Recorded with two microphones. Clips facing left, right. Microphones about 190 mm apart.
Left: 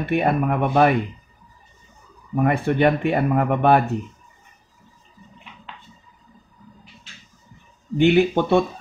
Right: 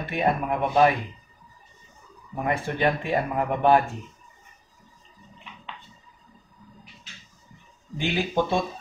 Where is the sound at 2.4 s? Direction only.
65° left (ahead or behind).